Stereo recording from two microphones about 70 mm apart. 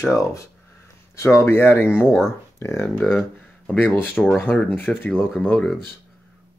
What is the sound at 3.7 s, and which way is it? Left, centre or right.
Speech, left.